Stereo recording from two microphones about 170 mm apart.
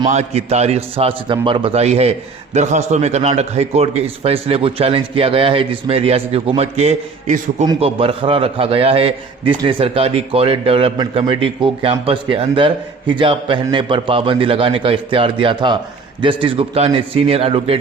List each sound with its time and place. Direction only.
0.0 s a man's voice: 40° right (ahead or behind)
7.8 s a man's voice: 35° right (ahead or behind)